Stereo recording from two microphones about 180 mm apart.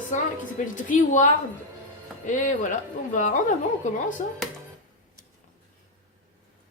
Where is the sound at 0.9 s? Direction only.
45° left (ahead or behind).